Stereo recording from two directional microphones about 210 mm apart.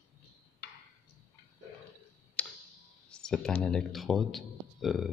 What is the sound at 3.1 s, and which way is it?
A man's voice, 5° left (ahead or behind).